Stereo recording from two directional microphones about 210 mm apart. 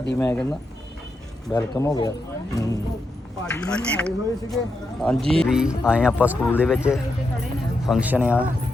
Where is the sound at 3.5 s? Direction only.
5° left (ahead or behind).